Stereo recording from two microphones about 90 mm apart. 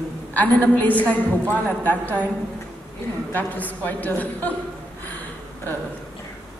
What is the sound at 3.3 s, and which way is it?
A man's voice, 20° left (ahead or behind).